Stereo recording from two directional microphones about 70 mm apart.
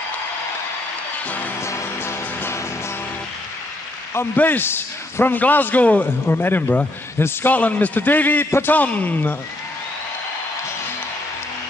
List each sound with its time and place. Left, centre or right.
1.6 s music: left
4.4 s a man's voice: left
8.7 s a man's voice: left